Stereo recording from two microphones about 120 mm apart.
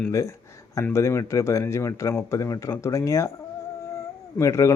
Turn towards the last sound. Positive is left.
turn(degrees=25)  # may be behind; listen again after turning